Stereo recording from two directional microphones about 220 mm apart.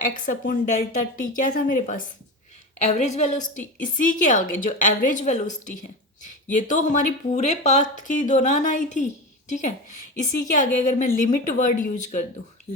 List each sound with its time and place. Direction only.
0.0 s speech: 35° left (ahead or behind)